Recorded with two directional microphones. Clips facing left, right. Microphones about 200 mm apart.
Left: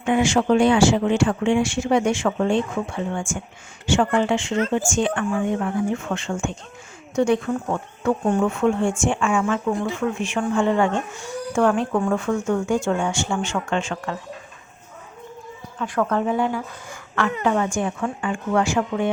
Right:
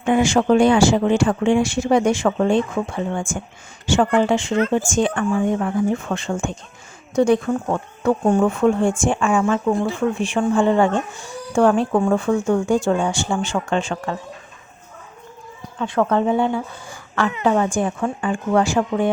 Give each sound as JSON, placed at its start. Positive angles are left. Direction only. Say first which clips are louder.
{"t": 0.0, "sound": "speech", "louder": "right 2 dB", "side_deg": -40}
{"t": 15.8, "sound": "speech", "louder": "right 3 dB", "side_deg": -25}